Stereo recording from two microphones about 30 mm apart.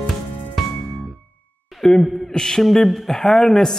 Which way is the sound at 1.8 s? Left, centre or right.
Centre.